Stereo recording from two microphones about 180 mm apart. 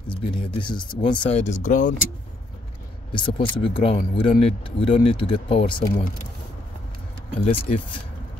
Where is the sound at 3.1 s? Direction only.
25° left (ahead or behind).